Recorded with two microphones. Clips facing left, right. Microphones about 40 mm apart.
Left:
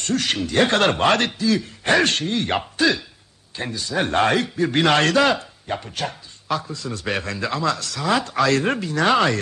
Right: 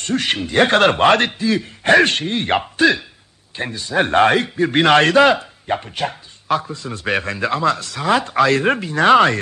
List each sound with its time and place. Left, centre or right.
0.0 s a man's voice: right